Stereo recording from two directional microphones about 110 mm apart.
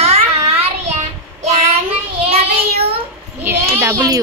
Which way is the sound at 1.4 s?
75° right (ahead or behind).